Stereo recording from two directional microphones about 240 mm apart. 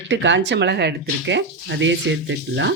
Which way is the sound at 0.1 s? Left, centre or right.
Right.